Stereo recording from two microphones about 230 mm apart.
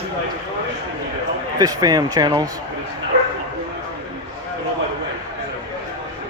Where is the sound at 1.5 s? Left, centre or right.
Centre.